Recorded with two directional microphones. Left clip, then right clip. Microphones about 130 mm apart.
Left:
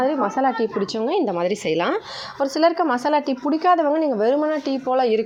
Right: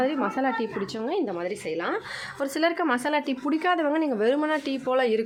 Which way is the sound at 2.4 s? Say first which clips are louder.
Left 7 dB; 15° left (ahead or behind).